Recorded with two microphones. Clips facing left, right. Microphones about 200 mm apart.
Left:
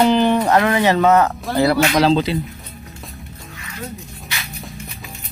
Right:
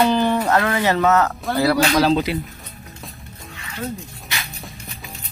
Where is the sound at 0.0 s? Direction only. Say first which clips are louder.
Left 3 dB; 20° left (ahead or behind).